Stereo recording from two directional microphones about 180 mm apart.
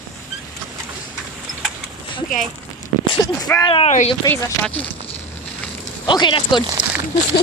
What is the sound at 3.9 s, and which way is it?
Speech, 40° left (ahead or behind).